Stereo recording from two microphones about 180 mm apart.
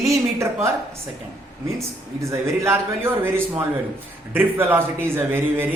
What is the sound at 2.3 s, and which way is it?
Speech, 15° right (ahead or behind).